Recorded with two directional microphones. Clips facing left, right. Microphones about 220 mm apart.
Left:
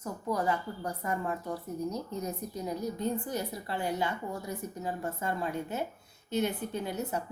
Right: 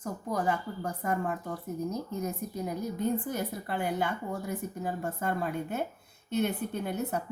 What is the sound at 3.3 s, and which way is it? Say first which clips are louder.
A woman's voice: right 2 dB; 50° right (ahead or behind).